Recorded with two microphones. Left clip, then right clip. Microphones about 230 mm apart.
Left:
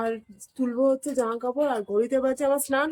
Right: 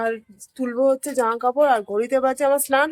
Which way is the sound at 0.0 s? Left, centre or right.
Centre.